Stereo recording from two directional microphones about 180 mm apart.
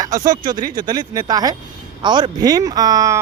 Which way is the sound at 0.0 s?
20° right (ahead or behind).